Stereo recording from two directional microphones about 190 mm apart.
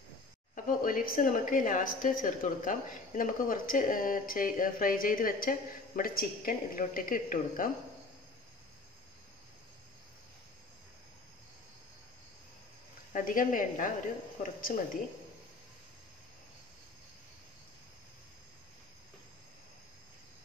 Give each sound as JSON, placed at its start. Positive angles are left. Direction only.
{"t": 0.7, "sound": "a woman's voice", "side_deg": 45}
{"t": 13.1, "sound": "a woman's voice", "side_deg": 45}